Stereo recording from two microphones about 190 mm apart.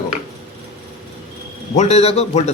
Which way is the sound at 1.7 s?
35° left (ahead or behind).